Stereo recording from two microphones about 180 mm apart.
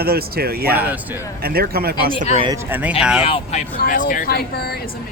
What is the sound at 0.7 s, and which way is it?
Speech, 10° right (ahead or behind).